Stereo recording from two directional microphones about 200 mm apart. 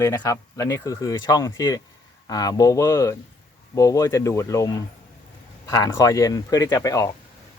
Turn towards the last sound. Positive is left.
turn(degrees=15)  # may be behind; listen again after turning